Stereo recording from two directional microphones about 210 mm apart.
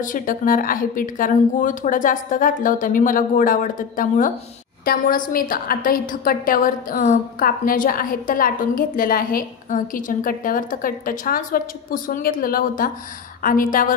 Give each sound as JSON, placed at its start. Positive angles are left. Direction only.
{"t": 0.0, "sound": "a woman's voice", "side_deg": 40}